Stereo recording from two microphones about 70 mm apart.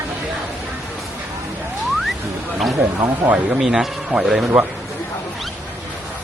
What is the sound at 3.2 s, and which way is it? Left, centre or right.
Speech, right.